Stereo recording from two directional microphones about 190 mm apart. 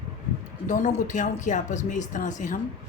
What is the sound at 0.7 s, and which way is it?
Speech, 40° left (ahead or behind).